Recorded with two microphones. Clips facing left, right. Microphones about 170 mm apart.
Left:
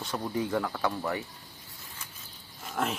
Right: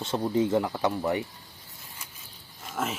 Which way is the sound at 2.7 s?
Centre (ahead or behind).